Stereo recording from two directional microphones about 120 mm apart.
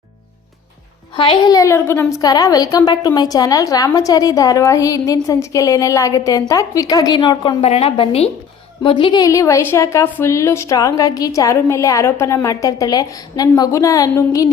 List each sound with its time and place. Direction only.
1.1 s a woman's voice: 45° left (ahead or behind)
1.5 s a woman's voice: 25° left (ahead or behind)
7.6 s a woman's voice: 55° left (ahead or behind)
9.2 s a woman's voice: 25° left (ahead or behind)